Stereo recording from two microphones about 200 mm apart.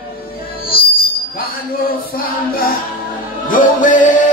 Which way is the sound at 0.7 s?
50° left (ahead or behind).